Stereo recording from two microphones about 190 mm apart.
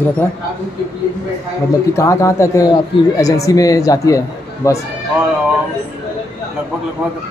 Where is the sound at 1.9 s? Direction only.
15° left (ahead or behind).